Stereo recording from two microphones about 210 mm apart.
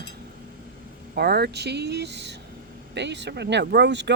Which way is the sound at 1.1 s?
50° right (ahead or behind).